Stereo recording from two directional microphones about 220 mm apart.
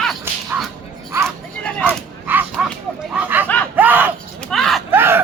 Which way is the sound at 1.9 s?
10° right (ahead or behind).